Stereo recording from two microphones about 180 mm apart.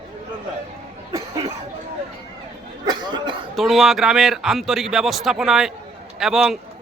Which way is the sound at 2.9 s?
25° right (ahead or behind).